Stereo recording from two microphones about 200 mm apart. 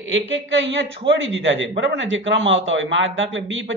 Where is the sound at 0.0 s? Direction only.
70° right (ahead or behind).